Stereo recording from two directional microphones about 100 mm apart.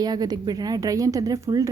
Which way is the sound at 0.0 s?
40° right (ahead or behind).